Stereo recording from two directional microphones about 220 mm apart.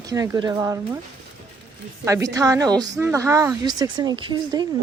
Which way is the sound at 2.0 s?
15° right (ahead or behind).